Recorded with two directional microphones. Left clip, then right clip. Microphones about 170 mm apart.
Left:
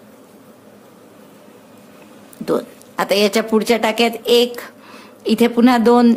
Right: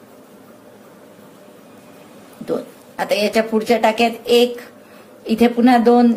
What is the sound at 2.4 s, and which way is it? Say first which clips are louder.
Speech: left 4 dB; 50° left (ahead or behind).